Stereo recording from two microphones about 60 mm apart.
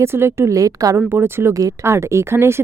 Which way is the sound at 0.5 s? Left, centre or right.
Right.